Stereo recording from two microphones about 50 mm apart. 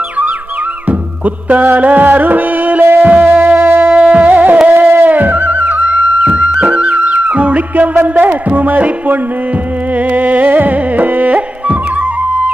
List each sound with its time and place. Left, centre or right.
0.8 s music: right
3.9 s music: right
4.3 s music: right
10.1 s carnatic music: right